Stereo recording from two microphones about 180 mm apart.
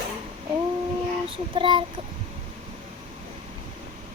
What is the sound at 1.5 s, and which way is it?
Speech, 25° right (ahead or behind).